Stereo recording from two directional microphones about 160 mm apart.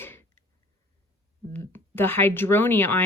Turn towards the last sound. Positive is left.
turn(degrees=15)  # may be behind; listen again after turning